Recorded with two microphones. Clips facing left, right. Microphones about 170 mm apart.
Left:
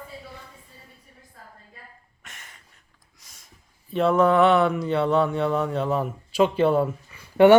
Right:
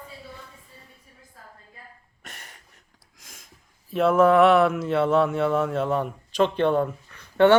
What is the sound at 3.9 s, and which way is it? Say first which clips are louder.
Speech: right 1 dB; centre (ahead or behind).